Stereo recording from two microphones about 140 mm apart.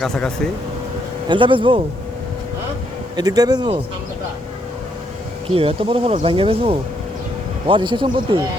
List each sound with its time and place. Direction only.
0.0 s speech: 5° left (ahead or behind)
1.3 s speech: 35° right (ahead or behind)
3.2 s speech: 30° right (ahead or behind)
5.5 s speech: 40° right (ahead or behind)